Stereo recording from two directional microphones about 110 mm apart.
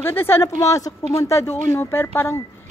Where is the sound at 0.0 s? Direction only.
20° left (ahead or behind).